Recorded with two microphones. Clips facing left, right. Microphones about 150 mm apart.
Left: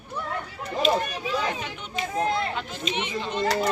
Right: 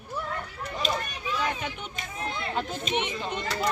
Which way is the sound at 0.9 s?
55° left (ahead or behind).